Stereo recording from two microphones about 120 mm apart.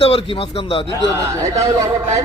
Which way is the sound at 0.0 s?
50° left (ahead or behind).